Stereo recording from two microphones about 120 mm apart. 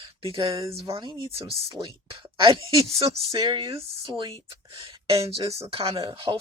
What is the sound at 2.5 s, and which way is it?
Speech, 50° right (ahead or behind).